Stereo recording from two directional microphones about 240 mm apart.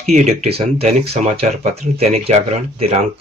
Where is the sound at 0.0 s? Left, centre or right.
Right.